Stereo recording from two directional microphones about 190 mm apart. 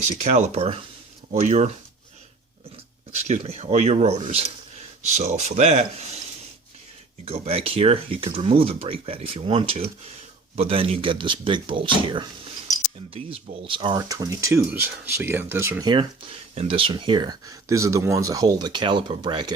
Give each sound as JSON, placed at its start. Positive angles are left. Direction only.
{"t": 0.1, "sound": "speech", "side_deg": -40}
{"t": 3.2, "sound": "speech", "side_deg": -35}
{"t": 7.3, "sound": "speech", "side_deg": -30}
{"t": 15.9, "sound": "speech", "side_deg": -25}